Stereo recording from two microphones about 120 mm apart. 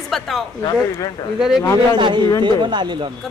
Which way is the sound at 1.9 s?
40° right (ahead or behind).